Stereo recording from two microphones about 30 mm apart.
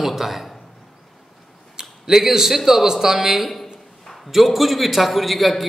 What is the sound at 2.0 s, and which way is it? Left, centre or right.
A man's voice, centre.